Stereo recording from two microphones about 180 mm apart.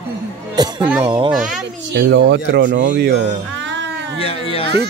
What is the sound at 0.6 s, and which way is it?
Speech, 25° right (ahead or behind).